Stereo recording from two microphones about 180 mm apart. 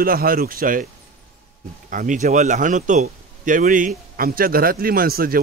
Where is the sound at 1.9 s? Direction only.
45° right (ahead or behind).